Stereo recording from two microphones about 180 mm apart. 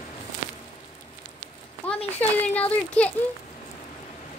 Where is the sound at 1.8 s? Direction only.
10° left (ahead or behind).